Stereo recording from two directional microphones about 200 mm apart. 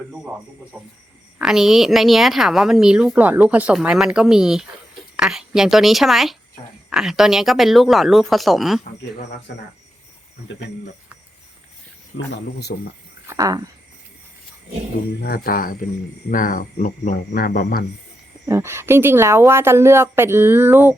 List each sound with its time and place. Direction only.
0.7 s a woman's voice: 5° right (ahead or behind)
12.1 s speech: 55° left (ahead or behind)
13.2 s speech: 15° right (ahead or behind)
15.2 s speech: 45° left (ahead or behind)
18.4 s speech: 15° right (ahead or behind)